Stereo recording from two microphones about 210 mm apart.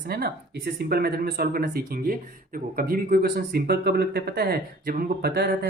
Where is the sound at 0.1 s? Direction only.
50° right (ahead or behind).